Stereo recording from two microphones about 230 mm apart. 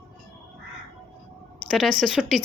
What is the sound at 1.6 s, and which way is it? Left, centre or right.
Speech, centre.